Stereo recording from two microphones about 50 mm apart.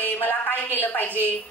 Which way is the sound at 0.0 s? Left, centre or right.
Left.